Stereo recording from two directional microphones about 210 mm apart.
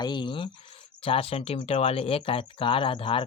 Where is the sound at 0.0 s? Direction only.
20° left (ahead or behind).